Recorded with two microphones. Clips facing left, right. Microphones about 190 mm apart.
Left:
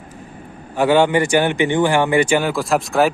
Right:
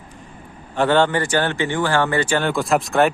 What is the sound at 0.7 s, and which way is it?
A man's voice, 10° left (ahead or behind).